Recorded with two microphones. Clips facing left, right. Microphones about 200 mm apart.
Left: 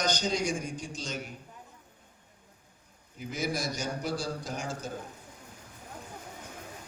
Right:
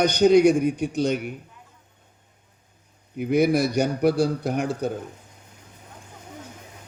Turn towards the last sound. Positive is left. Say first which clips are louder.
# right 12 dB
turn(degrees=-60)  # may be behind; listen again after turning